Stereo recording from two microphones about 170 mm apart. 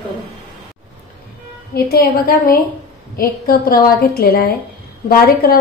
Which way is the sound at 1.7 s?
65° left (ahead or behind).